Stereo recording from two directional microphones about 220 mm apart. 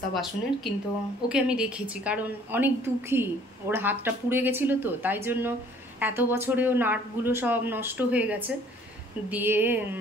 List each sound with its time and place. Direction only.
0.1 s a woman's voice: centre (ahead or behind)